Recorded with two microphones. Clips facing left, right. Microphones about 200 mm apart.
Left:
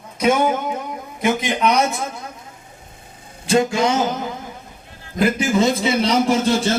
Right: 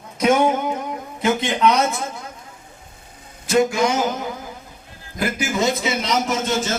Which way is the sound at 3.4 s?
25° left (ahead or behind).